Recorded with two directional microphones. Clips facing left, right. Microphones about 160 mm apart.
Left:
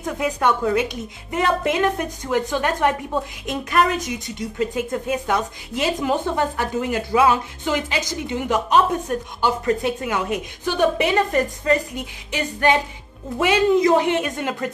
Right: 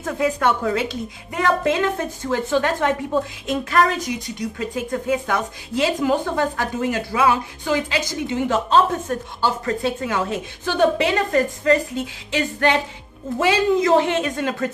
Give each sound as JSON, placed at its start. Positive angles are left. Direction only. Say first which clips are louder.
{"t": 0.0, "sound": "a woman's voice", "louder": "right 1 dB", "side_deg": 15}